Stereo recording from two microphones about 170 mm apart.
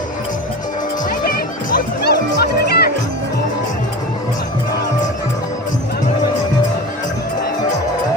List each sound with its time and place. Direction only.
1.7 s music: 70° left (ahead or behind)